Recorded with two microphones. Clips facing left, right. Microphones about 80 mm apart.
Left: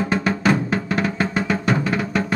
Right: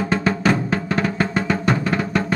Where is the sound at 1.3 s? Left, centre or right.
Centre.